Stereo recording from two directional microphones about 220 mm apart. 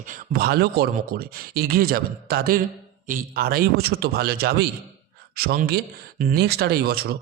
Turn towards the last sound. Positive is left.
turn(degrees=-45)  # may be behind; listen again after turning